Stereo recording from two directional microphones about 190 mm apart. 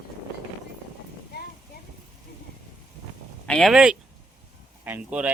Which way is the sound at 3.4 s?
Centre (ahead or behind).